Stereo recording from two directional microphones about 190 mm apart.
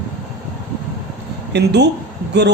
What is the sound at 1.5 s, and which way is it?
Speech, 60° right (ahead or behind).